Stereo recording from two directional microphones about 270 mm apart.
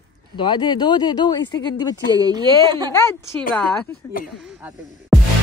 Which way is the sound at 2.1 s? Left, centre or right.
Centre.